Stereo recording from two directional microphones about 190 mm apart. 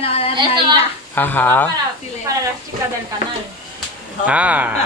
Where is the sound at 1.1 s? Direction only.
10° left (ahead or behind).